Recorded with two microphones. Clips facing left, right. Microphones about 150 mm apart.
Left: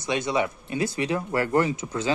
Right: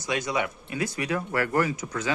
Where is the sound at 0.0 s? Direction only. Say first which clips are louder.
Left 3 dB; 25° left (ahead or behind).